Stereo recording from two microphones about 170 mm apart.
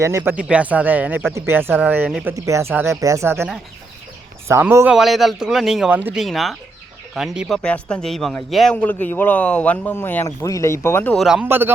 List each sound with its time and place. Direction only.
0.0 s speech: 15° right (ahead or behind)
4.4 s speech: 15° right (ahead or behind)
4.9 s speech: centre (ahead or behind)
6.2 s a man's voice: centre (ahead or behind)
11.4 s speech: 10° right (ahead or behind)